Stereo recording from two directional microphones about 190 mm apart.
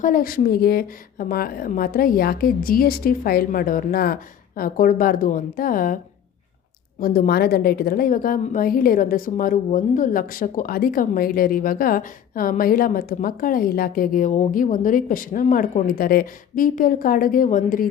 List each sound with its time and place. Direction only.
0.0 s a woman's voice: 45° left (ahead or behind)
7.0 s a woman's voice: 50° left (ahead or behind)